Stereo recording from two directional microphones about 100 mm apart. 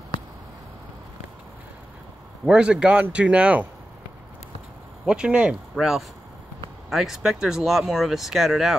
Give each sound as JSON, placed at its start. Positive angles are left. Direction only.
{"t": 2.4, "sound": "speech", "side_deg": -10}
{"t": 5.0, "sound": "speech", "side_deg": -10}